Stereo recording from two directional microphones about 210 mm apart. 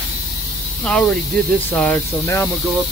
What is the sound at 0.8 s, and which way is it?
Speech, 5° left (ahead or behind).